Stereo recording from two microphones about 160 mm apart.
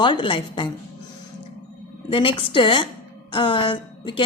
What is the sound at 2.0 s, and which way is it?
A woman's voice, 35° left (ahead or behind).